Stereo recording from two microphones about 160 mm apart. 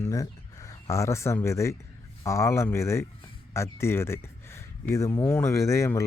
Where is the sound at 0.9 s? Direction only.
20° left (ahead or behind).